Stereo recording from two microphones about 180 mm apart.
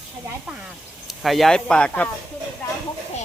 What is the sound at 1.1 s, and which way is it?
Speech, centre (ahead or behind).